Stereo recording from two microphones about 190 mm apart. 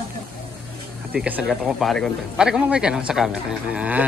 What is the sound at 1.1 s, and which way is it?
Speech, 5° right (ahead or behind).